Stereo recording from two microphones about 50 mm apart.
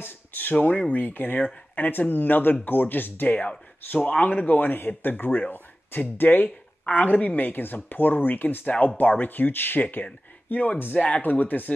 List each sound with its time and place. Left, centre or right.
0.0 s speech: left
11.0 s speech: left
11.2 s speech: left